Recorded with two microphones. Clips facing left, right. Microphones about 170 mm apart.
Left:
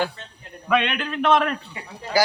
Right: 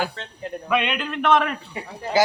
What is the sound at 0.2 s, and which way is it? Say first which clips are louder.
Speech: right 6 dB; 75° right (ahead or behind).